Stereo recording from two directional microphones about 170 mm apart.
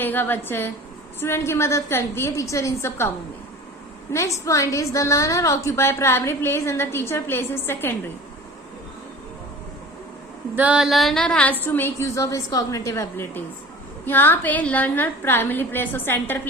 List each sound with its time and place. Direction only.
0.0 s a woman's voice: 10° left (ahead or behind)
4.1 s a woman's voice: 20° left (ahead or behind)
10.5 s a sound: 10° right (ahead or behind)
11.6 s a woman's voice: 10° left (ahead or behind)